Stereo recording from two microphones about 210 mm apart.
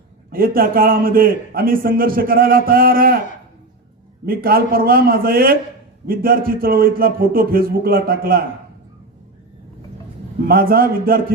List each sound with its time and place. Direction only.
0.3 s a man's voice: 45° right (ahead or behind)
4.3 s a man's voice: 45° right (ahead or behind)
10.4 s a man's voice: 45° right (ahead or behind)